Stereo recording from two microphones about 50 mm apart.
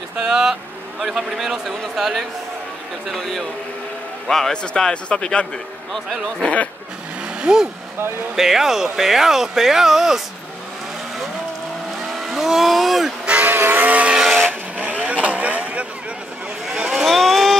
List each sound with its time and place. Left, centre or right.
0.2 s a man's voice: centre; by 6.7 s left
7.5 s speech: centre
12.1 s speech: centre
13.2 s vehicle: right
13.5 s vehicle: right
14.1 s vehicle: centre
14.8 s vehicle: right
16.6 s vehicle: centre
17.0 s a sound: centre